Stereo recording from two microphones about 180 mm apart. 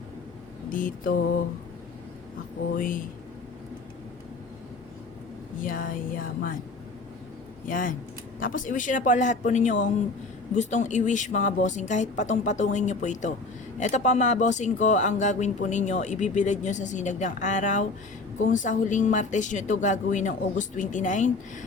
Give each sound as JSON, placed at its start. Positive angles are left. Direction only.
{"t": 0.7, "sound": "speech", "side_deg": 50}
{"t": 2.7, "sound": "speech", "side_deg": 50}
{"t": 5.6, "sound": "a sound", "side_deg": 50}
{"t": 7.7, "sound": "speech", "side_deg": 50}